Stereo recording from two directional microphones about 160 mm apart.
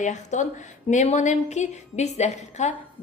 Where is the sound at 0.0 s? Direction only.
50° left (ahead or behind).